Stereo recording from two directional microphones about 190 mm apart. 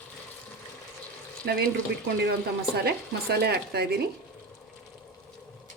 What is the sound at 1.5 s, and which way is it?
Speech, 55° right (ahead or behind).